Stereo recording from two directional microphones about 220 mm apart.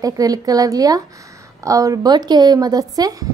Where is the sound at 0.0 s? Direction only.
15° right (ahead or behind).